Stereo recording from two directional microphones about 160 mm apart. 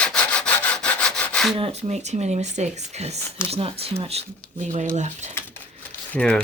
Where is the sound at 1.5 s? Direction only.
40° right (ahead or behind).